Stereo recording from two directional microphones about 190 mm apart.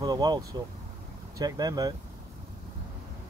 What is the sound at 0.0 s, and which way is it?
Speech, 20° right (ahead or behind).